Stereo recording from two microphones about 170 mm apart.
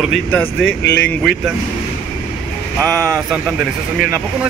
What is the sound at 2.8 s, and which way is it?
Speech, 5° left (ahead or behind).